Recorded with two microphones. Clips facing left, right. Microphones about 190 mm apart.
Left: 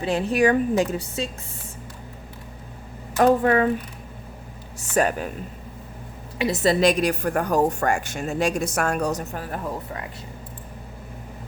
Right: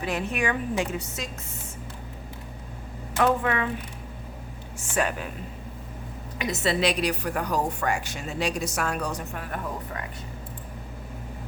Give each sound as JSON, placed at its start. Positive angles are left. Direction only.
{"t": 0.0, "sound": "a woman's voice", "side_deg": 30}
{"t": 3.2, "sound": "a woman's voice", "side_deg": 40}
{"t": 4.8, "sound": "a woman's voice", "side_deg": 40}
{"t": 6.4, "sound": "a woman's voice", "side_deg": 35}